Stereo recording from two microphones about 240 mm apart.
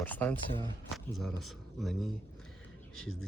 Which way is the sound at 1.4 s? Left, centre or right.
Centre.